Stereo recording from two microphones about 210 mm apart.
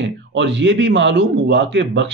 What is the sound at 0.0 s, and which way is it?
Speech, 60° right (ahead or behind).